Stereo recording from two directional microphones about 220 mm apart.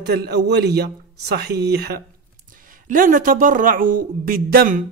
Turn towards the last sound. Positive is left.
turn(degrees=-40)  # may be behind; listen again after turning